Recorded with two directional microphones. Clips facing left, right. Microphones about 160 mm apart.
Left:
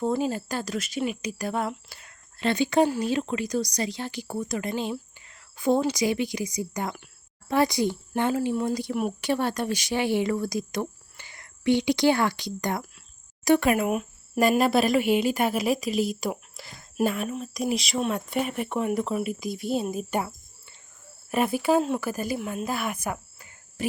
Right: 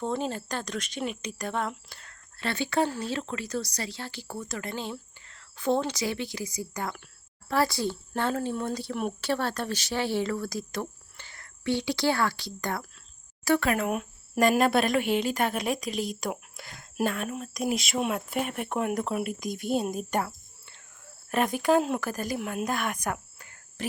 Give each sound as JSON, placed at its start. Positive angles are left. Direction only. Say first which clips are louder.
{"t": 0.0, "sound": "speech", "louder": "left 4 dB", "side_deg": 5}